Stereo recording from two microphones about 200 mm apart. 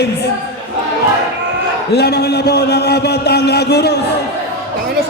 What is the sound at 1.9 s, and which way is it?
A man's voice, 55° left (ahead or behind).